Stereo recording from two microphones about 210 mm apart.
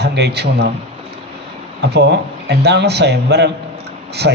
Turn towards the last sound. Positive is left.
turn(degrees=-60)  # may be behind; listen again after turning